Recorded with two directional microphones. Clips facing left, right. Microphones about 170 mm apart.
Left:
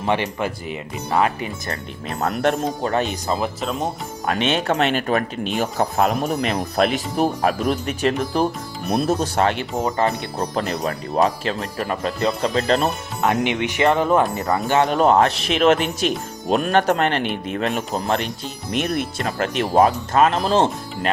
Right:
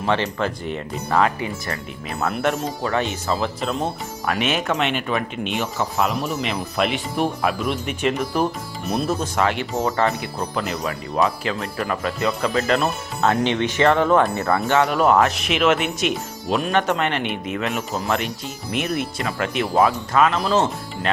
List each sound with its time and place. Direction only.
0.0 s speech: 15° left (ahead or behind)
2.2 s speech: 40° left (ahead or behind)
3.6 s speech: centre (ahead or behind)
4.4 s speech: 30° left (ahead or behind)
9.8 s speech: 20° left (ahead or behind)
10.3 s speech: 35° left (ahead or behind)
13.2 s speech: 15° left (ahead or behind)
14.7 s speech: 25° left (ahead or behind)
16.5 s speech: 45° left (ahead or behind)
17.2 s speech: centre (ahead or behind)
17.5 s speech: 35° left (ahead or behind)
18.7 s speech: 5° right (ahead or behind)
19.2 s speech: 40° left (ahead or behind)